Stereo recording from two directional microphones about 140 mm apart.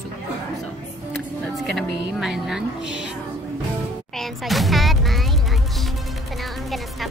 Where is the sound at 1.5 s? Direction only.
Centre (ahead or behind).